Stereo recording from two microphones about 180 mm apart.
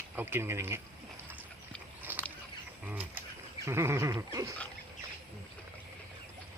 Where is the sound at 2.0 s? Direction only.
10° right (ahead or behind).